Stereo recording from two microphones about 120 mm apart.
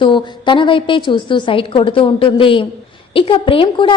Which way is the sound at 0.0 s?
45° left (ahead or behind).